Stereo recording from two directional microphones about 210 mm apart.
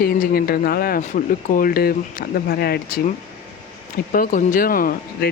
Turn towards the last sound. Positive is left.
turn(degrees=45)  # may be behind; listen again after turning